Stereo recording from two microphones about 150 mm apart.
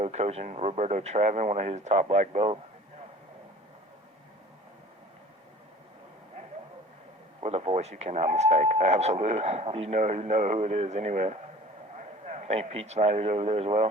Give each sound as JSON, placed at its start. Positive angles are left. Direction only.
{"t": 0.0, "sound": "speech", "side_deg": -45}
{"t": 7.4, "sound": "a man's voice", "side_deg": -45}